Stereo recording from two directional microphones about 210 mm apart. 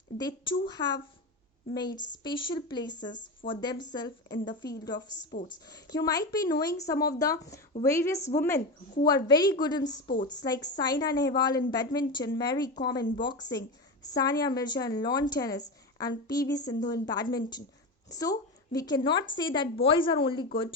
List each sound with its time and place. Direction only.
0.2 s a woman's voice: 20° left (ahead or behind)